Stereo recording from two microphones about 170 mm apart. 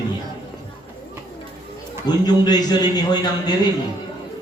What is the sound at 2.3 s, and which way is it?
A man's voice, 25° left (ahead or behind).